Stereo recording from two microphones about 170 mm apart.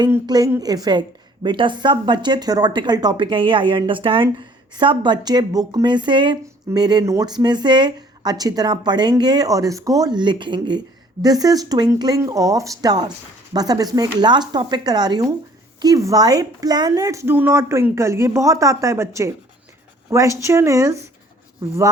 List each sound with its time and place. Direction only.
0.1 s speech: 20° right (ahead or behind)